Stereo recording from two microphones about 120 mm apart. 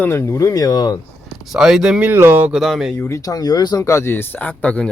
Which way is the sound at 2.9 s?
25° left (ahead or behind).